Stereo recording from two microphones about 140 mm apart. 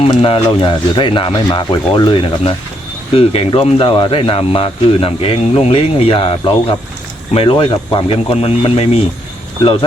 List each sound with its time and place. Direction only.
0.0 s speech: 45° left (ahead or behind)